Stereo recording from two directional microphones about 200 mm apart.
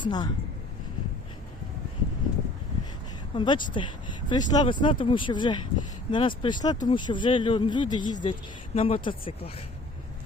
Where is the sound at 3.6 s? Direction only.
25° left (ahead or behind).